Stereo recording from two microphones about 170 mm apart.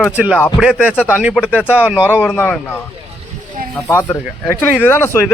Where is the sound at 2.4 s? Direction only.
10° left (ahead or behind).